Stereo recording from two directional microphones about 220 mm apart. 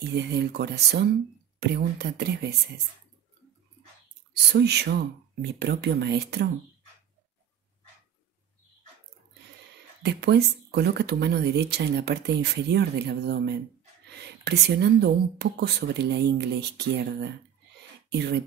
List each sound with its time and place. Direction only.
0.0 s speech: 50° right (ahead or behind)
4.5 s speech: 50° right (ahead or behind)
10.0 s speech: 50° right (ahead or behind)